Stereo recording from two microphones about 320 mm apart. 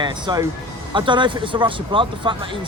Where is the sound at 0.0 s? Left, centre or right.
Centre.